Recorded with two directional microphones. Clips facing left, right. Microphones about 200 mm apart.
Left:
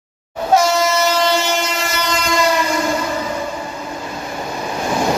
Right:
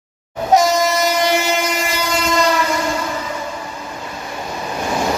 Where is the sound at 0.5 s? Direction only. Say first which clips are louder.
Even; 15° right (ahead or behind).